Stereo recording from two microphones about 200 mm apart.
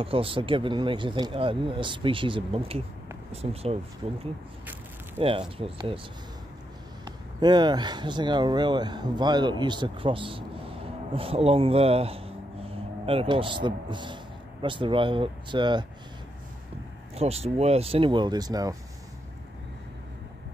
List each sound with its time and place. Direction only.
0.0 s speech: 25° right (ahead or behind)
5.6 s speech: 30° right (ahead or behind)
7.1 s speech: 20° right (ahead or behind)
17.1 s speech: 30° right (ahead or behind)